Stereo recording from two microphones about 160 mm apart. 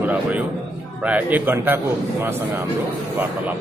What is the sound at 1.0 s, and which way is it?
Speech, 10° right (ahead or behind).